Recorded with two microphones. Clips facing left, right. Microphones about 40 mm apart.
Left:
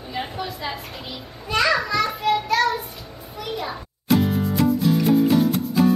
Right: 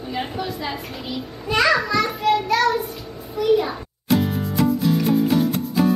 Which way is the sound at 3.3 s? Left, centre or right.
Centre.